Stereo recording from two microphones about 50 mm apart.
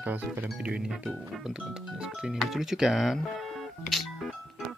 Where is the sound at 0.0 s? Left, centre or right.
Right.